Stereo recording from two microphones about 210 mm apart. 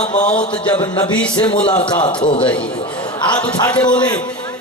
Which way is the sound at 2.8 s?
25° left (ahead or behind).